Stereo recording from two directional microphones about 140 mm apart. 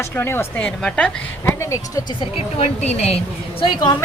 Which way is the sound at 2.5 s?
50° left (ahead or behind).